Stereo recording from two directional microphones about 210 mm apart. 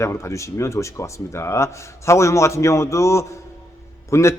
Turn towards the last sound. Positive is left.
turn(degrees=15)  # may be behind; listen again after turning